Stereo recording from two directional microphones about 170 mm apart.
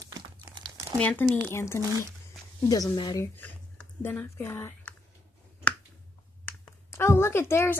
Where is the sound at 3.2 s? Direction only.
10° left (ahead or behind).